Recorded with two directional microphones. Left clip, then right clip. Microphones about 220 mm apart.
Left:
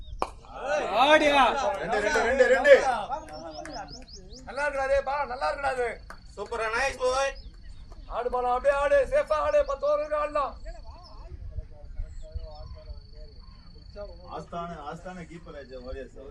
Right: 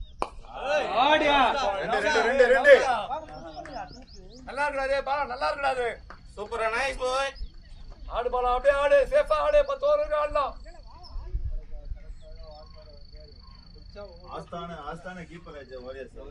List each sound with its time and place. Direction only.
0.5 s a sound: 40° right (ahead or behind)
0.9 s a man's voice: 55° left (ahead or behind)
1.5 s a man's voice: 40° right (ahead or behind)
1.8 s a man's voice: 25° right (ahead or behind)
2.8 s a sound: 40° right (ahead or behind)
3.2 s bird: 50° left (ahead or behind)
4.4 s a man's voice: 45° right (ahead or behind)
6.3 s a man's voice: 20° right (ahead or behind)
8.1 s a man's voice: 45° right (ahead or behind)
13.9 s a man's voice: 35° right (ahead or behind)